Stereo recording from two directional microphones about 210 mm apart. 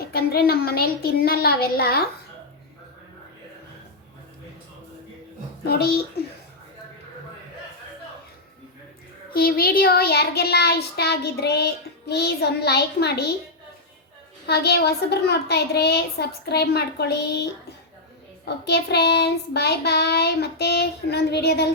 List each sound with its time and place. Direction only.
0.0 s child singing: 45° left (ahead or behind)
5.6 s child singing: 50° left (ahead or behind)
9.3 s child singing: 45° left (ahead or behind)
14.4 s child singing: 50° left (ahead or behind)